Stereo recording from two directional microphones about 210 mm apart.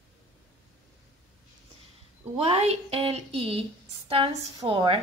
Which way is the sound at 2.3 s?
30° right (ahead or behind).